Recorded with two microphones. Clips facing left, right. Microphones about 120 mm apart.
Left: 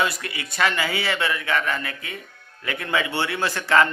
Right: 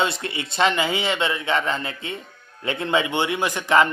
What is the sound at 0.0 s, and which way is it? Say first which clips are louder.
A man's voice: right 1 dB; 25° right (ahead or behind).